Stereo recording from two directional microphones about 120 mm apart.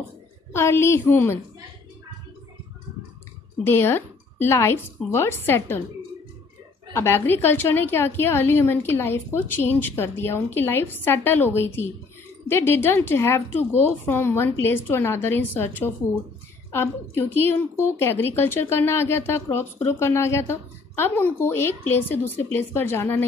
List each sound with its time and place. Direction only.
0.5 s a woman's voice: 20° left (ahead or behind)
3.6 s a woman's voice: 20° left (ahead or behind)
6.9 s a woman's voice: 20° left (ahead or behind)